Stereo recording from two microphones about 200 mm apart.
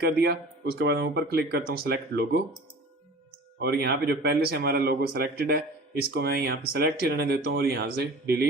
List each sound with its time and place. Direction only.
0.0 s a man's voice: 50° right (ahead or behind)
3.6 s a man's voice: 55° right (ahead or behind)